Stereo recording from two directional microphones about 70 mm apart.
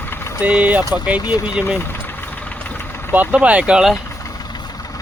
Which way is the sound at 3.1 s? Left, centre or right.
Right.